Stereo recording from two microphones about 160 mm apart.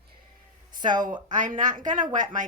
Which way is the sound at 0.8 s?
25° right (ahead or behind).